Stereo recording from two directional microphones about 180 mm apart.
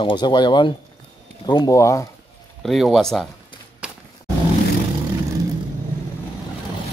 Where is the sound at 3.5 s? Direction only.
25° left (ahead or behind).